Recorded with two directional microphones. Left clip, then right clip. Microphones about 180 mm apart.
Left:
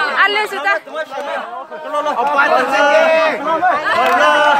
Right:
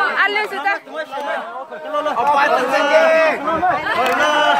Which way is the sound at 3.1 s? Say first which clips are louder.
Left 1 dB; 30° right (ahead or behind).